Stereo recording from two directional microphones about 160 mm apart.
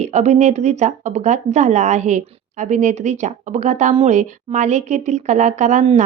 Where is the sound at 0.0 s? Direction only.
45° right (ahead or behind).